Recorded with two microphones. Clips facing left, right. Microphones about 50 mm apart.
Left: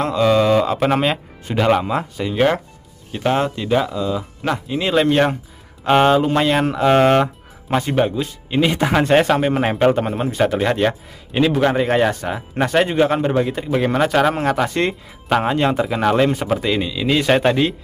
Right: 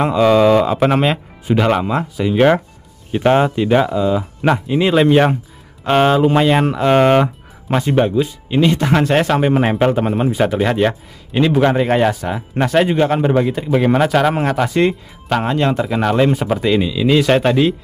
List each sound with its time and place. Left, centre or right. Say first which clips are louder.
0.0 s speech: right 4 dB; centre
3.1 s speech: right 5 dB; centre